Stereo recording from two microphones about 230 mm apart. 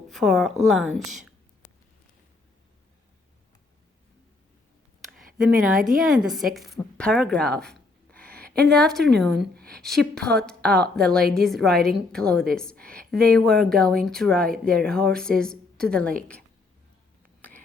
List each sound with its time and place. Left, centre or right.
0.1 s a woman's voice: centre
5.0 s a woman's voice: centre
7.7 s dog: centre
8.5 s a woman's voice: centre
10.2 s a woman's voice: right
10.4 s a woman's voice: centre